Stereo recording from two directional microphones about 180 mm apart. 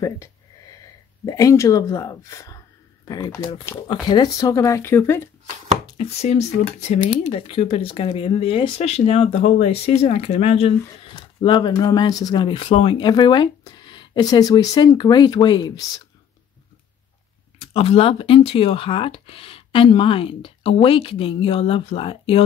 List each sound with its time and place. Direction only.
0.0 s a sound: 15° left (ahead or behind)
1.2 s speech: 20° left (ahead or behind)
5.9 s speech: 35° left (ahead or behind)
17.6 s speech: 35° left (ahead or behind)